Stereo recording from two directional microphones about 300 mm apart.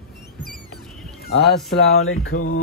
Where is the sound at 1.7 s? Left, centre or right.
Left.